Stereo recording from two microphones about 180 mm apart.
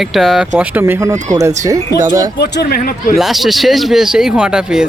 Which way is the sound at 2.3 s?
65° left (ahead or behind).